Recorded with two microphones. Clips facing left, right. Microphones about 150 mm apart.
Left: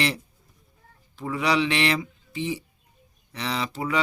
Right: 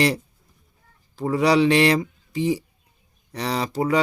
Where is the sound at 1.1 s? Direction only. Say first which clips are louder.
Right 6 dB; 35° right (ahead or behind).